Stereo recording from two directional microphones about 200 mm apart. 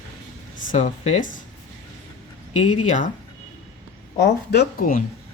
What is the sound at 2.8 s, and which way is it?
Speech, 35° left (ahead or behind).